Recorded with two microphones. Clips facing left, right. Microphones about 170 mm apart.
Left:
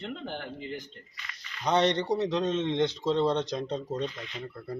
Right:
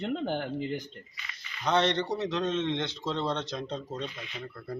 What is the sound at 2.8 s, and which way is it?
Speech, 40° left (ahead or behind).